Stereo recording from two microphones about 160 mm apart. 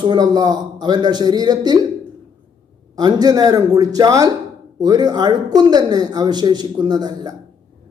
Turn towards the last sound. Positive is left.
turn(degrees=-25)  # may be behind; listen again after turning